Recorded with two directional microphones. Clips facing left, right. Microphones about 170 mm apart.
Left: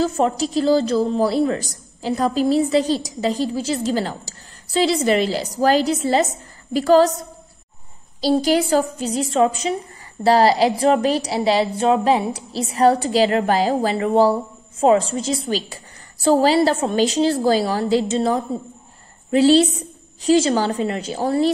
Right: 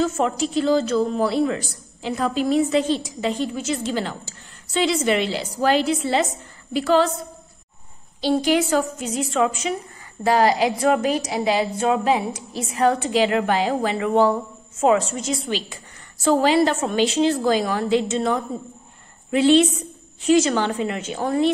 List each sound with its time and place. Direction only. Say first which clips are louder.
0.0 s a woman's voice: left 2 dB; 35° left (ahead or behind)
8.2 s a woman's voice: left 2 dB; 35° left (ahead or behind)